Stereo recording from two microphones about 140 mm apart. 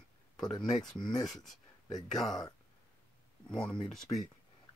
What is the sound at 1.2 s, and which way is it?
Speech, centre (ahead or behind).